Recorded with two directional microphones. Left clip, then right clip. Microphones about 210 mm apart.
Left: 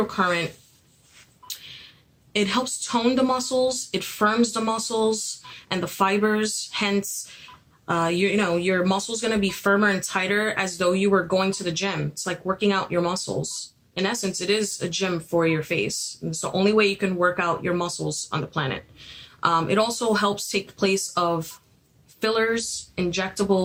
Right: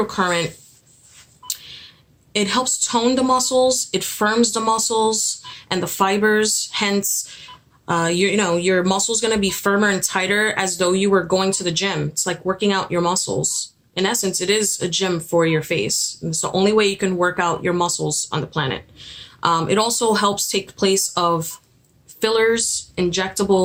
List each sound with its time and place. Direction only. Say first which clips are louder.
0.1 s speech: right 3 dB; 35° right (ahead or behind)
1.5 s telephone dialing: right 6 dB; 30° right (ahead or behind)
2.3 s speech: right 4 dB; 25° right (ahead or behind)